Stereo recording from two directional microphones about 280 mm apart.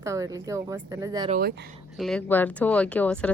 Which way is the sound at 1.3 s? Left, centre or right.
Right.